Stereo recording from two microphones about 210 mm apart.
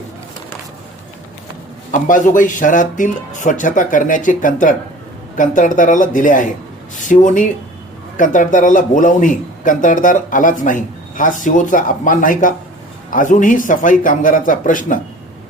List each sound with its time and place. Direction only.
1.9 s a man's voice: 40° left (ahead or behind)